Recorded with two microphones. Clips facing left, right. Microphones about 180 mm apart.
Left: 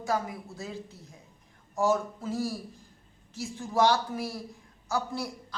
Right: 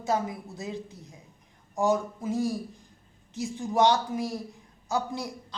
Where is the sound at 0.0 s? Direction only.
20° right (ahead or behind).